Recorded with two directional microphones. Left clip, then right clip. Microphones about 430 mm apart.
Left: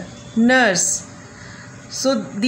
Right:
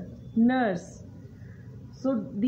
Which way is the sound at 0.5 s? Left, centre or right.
Right.